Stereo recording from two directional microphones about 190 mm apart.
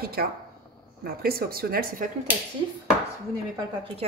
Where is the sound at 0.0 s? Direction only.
55° right (ahead or behind).